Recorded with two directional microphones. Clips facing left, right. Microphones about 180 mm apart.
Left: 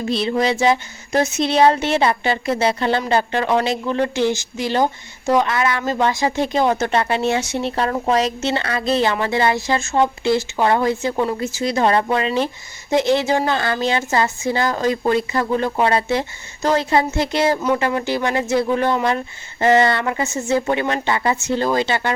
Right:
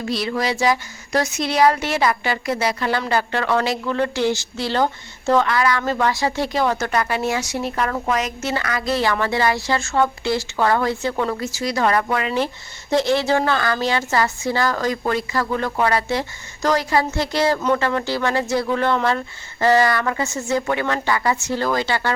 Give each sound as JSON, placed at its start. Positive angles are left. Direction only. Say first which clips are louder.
{"t": 0.1, "sound": "speech", "louder": "left 4 dB", "side_deg": 25}